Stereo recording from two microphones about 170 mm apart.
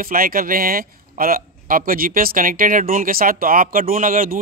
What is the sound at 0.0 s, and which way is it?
A man's voice, 55° right (ahead or behind).